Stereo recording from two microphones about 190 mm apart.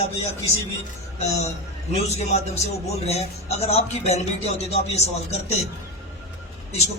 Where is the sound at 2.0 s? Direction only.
35° left (ahead or behind).